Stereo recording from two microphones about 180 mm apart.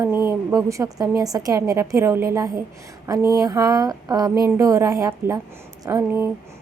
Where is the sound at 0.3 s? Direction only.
15° right (ahead or behind).